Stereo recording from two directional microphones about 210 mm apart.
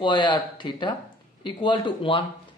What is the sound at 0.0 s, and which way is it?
A man's voice, 20° left (ahead or behind).